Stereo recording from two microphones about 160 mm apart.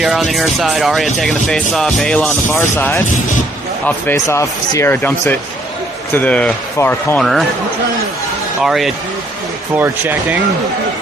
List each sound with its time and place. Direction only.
0.0 s speech: centre (ahead or behind)
7.2 s speech: centre (ahead or behind)
8.6 s speech: centre (ahead or behind)
9.7 s speech: 10° right (ahead or behind)